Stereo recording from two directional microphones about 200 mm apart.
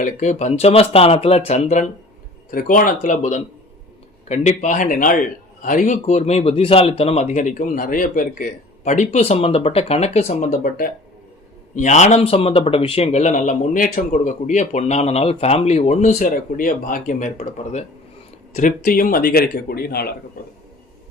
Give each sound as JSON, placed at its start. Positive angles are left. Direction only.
{"t": 0.0, "sound": "speech", "side_deg": 35}
{"t": 18.8, "sound": "speech", "side_deg": 45}